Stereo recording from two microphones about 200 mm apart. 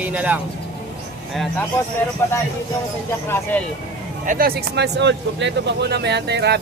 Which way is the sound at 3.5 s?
5° left (ahead or behind).